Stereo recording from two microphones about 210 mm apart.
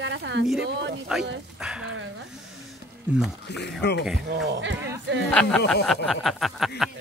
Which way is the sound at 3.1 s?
5° right (ahead or behind).